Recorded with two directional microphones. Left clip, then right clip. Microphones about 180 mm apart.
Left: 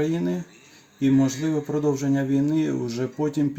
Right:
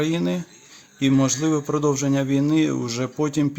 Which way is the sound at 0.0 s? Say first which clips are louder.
Right 2 dB; 15° right (ahead or behind).